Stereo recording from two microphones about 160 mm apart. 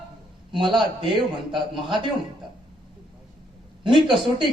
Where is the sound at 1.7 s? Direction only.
30° right (ahead or behind).